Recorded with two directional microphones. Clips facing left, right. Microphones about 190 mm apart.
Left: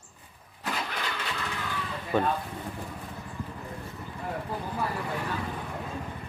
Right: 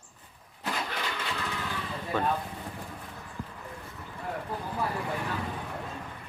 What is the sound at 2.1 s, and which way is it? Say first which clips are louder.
Speech: left 4 dB; 15° left (ahead or behind).